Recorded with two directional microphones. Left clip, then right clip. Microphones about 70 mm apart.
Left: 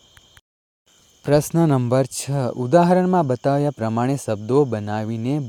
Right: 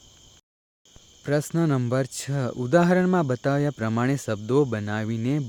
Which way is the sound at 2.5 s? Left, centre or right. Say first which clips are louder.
Left 5 dB; left.